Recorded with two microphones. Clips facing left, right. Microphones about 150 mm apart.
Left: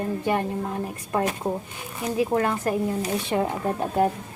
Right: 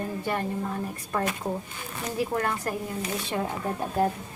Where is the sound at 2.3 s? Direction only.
25° left (ahead or behind).